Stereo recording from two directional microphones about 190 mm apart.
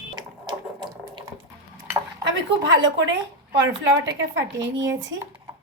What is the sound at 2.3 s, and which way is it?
Speech, 75° right (ahead or behind).